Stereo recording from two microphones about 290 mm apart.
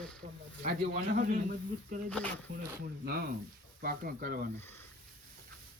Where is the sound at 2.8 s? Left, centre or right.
Right.